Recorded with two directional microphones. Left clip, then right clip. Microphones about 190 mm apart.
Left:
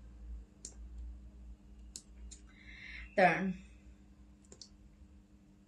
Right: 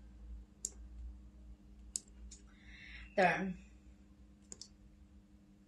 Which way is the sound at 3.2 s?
15° left (ahead or behind).